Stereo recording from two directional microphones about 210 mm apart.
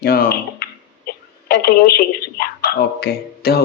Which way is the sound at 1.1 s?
45° left (ahead or behind).